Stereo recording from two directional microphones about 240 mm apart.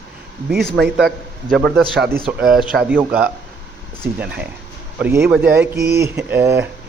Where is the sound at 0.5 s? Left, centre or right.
Right.